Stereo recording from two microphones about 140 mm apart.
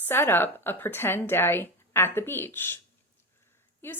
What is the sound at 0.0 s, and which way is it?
A woman's voice, 15° left (ahead or behind).